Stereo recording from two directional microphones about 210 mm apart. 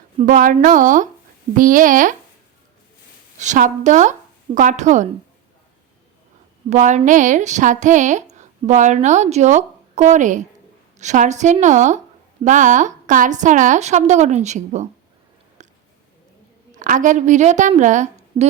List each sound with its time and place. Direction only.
0.2 s a woman's voice: 40° right (ahead or behind)
3.3 s a woman's voice: 35° right (ahead or behind)
6.7 s a woman's voice: 35° right (ahead or behind)
15.6 s a sound: 35° right (ahead or behind)
16.7 s a woman's voice: 40° right (ahead or behind)